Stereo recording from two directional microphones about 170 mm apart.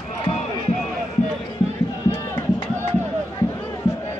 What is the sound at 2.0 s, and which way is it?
Music, 15° left (ahead or behind).